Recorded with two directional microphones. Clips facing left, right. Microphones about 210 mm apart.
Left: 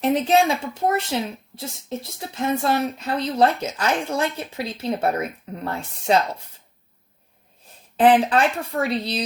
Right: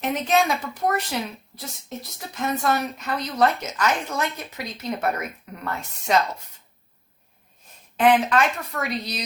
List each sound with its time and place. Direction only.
0.0 s speech: 30° left (ahead or behind)
7.9 s speech: 30° left (ahead or behind)